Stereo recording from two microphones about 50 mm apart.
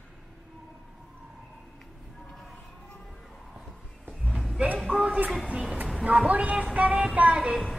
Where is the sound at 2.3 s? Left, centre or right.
Centre.